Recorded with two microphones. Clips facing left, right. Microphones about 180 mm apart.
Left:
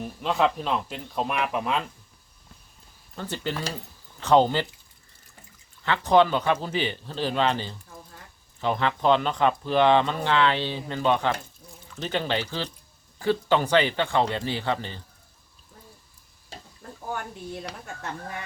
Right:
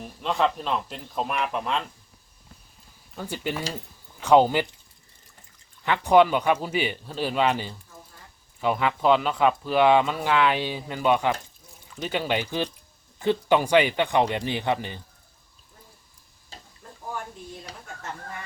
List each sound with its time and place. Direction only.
0.0 s speech: centre (ahead or behind)
3.2 s speech: 10° right (ahead or behind)
5.8 s speech: 15° right (ahead or behind)
17.5 s a woman's voice: 65° left (ahead or behind)